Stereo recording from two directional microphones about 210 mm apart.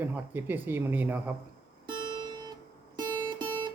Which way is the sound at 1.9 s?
20° right (ahead or behind).